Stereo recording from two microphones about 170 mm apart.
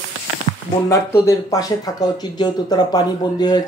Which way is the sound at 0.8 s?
20° left (ahead or behind).